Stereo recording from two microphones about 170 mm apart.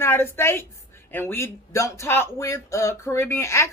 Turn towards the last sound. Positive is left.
turn(degrees=15)  # may be behind; listen again after turning